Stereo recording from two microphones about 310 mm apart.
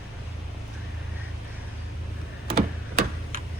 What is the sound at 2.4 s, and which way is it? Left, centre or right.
Tick-tock, centre.